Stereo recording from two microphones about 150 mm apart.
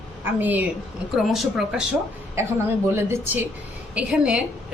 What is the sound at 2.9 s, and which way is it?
Speech, 20° right (ahead or behind).